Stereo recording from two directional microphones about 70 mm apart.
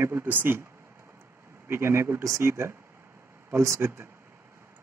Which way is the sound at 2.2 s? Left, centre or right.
Right.